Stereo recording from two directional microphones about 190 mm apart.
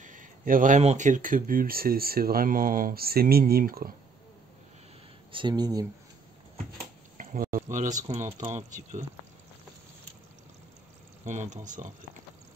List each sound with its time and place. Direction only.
0.0 s speech: 45° right (ahead or behind)
5.3 s speech: 25° right (ahead or behind)
7.2 s a sound: 50° right (ahead or behind)
7.7 s speech: 40° right (ahead or behind)
11.2 s speech: 40° right (ahead or behind)